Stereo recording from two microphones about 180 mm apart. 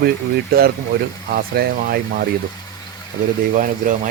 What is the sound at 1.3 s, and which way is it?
Speech, 60° right (ahead or behind).